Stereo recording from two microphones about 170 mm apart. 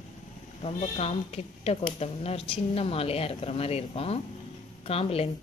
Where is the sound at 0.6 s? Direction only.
35° left (ahead or behind).